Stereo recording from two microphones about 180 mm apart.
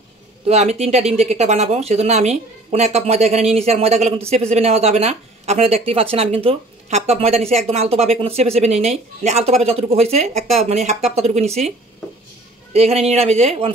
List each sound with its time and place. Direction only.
0.5 s speech: 35° right (ahead or behind)
12.7 s speech: 35° right (ahead or behind)